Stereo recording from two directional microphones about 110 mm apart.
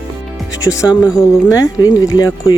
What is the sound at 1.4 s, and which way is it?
Speech, 35° left (ahead or behind).